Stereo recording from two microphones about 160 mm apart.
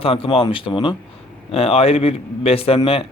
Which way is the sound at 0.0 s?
35° left (ahead or behind).